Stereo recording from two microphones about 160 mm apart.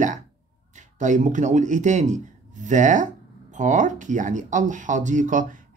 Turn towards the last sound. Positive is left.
turn(degrees=-55)  # may be behind; listen again after turning